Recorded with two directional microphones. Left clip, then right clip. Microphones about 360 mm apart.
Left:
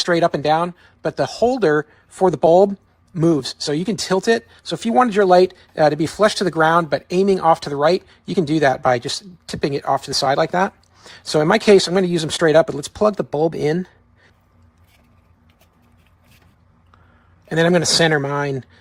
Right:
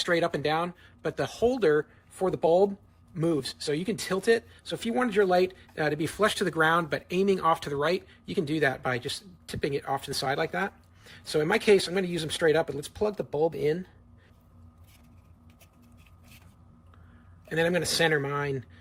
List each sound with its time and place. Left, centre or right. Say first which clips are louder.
0.0 s speech: left 9 dB; centre
17.5 s speech: left 10 dB; centre